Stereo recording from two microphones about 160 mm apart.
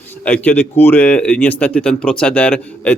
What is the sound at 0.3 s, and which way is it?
Speech, 10° left (ahead or behind).